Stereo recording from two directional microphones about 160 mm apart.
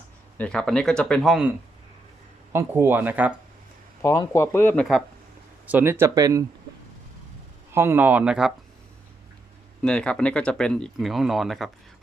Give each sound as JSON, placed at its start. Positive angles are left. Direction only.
{"t": 0.3, "sound": "speech", "side_deg": 5}
{"t": 2.5, "sound": "speech", "side_deg": -15}
{"t": 4.0, "sound": "speech", "side_deg": 20}
{"t": 5.6, "sound": "speech", "side_deg": -10}
{"t": 7.7, "sound": "speech", "side_deg": -15}
{"t": 9.8, "sound": "speech", "side_deg": 5}